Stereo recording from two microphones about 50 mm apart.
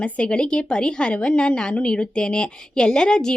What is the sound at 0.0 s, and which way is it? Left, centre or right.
A woman's voice, left.